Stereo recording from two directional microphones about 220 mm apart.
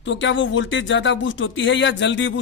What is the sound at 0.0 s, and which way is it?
Speech, 55° left (ahead or behind).